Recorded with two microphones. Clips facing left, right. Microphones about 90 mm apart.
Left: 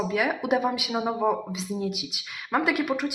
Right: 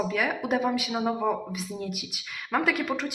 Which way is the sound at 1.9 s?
90° left.